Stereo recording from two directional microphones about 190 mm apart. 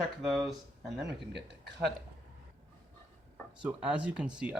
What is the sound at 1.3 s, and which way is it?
Speech, 65° right (ahead or behind).